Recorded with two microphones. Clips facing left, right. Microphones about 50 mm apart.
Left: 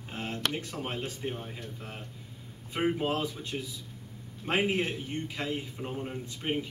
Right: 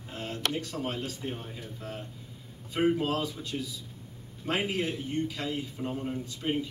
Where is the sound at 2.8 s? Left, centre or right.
Left.